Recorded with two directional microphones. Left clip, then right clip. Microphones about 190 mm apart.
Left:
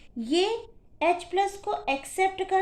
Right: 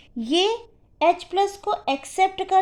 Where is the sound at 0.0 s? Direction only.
40° right (ahead or behind).